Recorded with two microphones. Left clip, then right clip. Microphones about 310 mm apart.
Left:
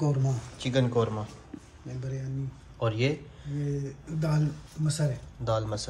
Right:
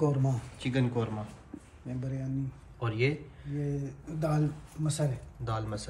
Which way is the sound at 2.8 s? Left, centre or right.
Centre.